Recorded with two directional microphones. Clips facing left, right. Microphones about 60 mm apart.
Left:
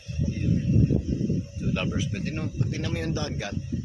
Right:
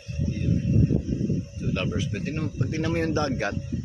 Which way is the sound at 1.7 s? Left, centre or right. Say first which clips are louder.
Right 1 dB; centre.